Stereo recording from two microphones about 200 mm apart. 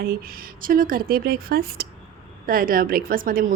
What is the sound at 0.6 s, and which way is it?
A woman's voice, 45° right (ahead or behind).